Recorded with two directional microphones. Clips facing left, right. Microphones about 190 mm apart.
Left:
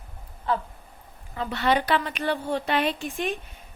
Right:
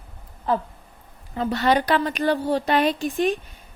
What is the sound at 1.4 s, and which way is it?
A woman's voice, 40° right (ahead or behind).